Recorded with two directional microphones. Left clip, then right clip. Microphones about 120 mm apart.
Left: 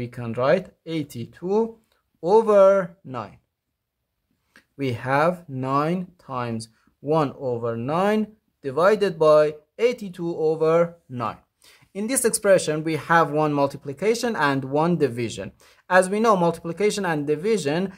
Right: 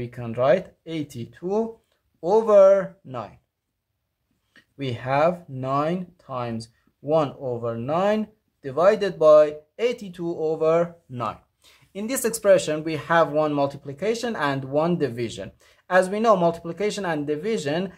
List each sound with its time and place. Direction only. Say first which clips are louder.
0.0 s speech: right 1 dB; 30° left (ahead or behind)
4.6 s speech: left 3 dB; 40° left (ahead or behind)